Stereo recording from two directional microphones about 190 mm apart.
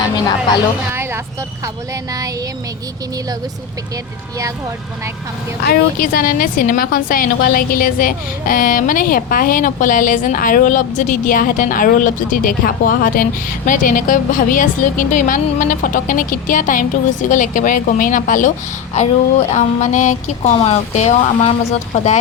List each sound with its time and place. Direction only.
0.9 s speech: 15° right (ahead or behind)
5.6 s a woman's voice: 50° left (ahead or behind)